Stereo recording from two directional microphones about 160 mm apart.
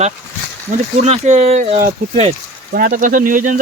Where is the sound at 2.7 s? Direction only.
65° right (ahead or behind).